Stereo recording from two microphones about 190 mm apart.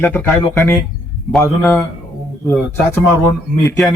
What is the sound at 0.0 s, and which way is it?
Speech, 5° left (ahead or behind).